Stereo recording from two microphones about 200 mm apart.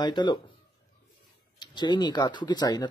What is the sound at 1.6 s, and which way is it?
Speech, 20° left (ahead or behind).